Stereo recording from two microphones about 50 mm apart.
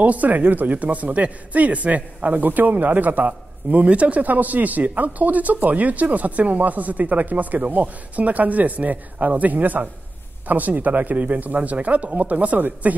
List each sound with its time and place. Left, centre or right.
0.0 s speech: right